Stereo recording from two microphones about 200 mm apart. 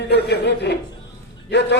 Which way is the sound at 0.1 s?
55° left (ahead or behind).